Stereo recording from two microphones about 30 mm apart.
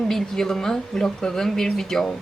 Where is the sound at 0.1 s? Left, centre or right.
Centre.